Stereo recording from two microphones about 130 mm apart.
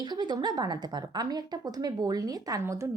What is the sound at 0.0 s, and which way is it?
A woman's voice, 35° right (ahead or behind).